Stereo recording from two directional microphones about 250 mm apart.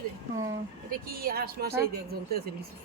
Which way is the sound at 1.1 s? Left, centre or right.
Right.